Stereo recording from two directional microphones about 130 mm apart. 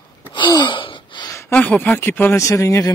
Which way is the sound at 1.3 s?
15° left (ahead or behind).